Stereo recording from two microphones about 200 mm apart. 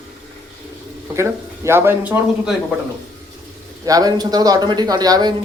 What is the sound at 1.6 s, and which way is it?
Speech, 10° right (ahead or behind).